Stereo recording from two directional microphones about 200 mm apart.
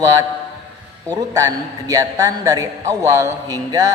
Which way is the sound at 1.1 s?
15° right (ahead or behind).